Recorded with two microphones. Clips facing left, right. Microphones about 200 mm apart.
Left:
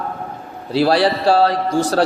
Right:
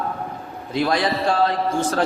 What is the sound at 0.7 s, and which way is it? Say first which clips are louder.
A man's voice: left 6 dB; 35° left (ahead or behind).